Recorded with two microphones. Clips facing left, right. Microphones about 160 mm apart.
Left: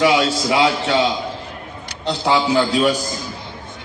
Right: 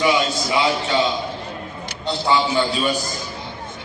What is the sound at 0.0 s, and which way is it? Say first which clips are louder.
Speech: left 3 dB; 90° left.